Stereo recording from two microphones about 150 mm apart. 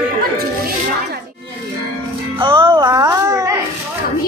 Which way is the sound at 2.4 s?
35° right (ahead or behind).